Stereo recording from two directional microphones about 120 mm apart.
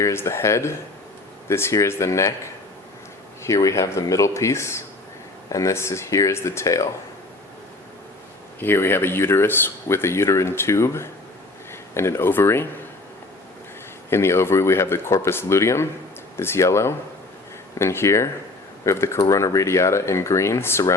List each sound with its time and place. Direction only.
0.0 s speech: 20° left (ahead or behind)
3.4 s speech: 25° left (ahead or behind)
8.5 s speech: 20° left (ahead or behind)
14.1 s speech: 20° left (ahead or behind)